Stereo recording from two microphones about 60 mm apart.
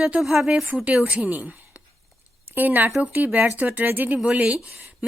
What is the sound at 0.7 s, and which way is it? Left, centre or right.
Speech, centre.